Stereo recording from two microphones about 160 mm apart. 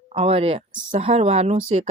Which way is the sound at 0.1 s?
40° right (ahead or behind).